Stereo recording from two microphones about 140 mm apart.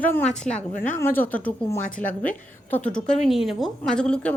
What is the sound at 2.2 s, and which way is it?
A woman's voice, 10° left (ahead or behind).